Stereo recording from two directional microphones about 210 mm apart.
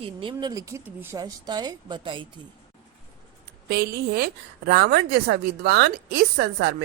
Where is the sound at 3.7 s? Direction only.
50° right (ahead or behind).